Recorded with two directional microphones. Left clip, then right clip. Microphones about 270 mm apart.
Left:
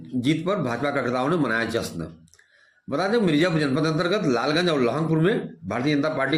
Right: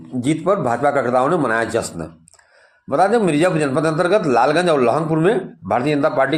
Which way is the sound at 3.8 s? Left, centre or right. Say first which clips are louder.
Right 10 dB; right.